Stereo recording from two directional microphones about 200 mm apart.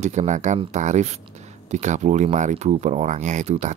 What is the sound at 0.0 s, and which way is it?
Speech, 35° right (ahead or behind).